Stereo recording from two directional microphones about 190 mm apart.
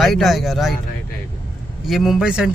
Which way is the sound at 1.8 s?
Centre (ahead or behind).